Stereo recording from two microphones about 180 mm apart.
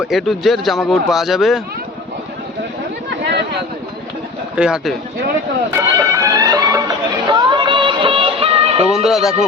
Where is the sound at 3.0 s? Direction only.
70° right (ahead or behind).